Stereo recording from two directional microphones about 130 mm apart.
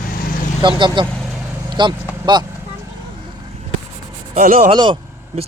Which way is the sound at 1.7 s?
35° right (ahead or behind).